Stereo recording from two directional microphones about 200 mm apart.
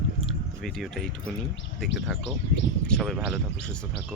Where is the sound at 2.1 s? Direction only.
Centre (ahead or behind).